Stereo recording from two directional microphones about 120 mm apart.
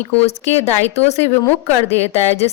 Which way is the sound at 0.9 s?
60° left (ahead or behind).